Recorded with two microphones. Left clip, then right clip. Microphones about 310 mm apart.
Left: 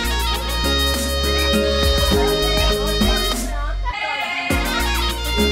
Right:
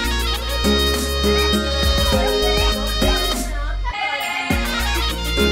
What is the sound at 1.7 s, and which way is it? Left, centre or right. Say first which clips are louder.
Music: left 1 dB; left.